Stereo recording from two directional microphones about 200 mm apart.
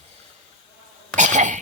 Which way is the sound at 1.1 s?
40° right (ahead or behind).